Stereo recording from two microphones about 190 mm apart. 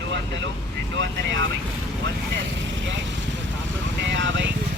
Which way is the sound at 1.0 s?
75° right (ahead or behind).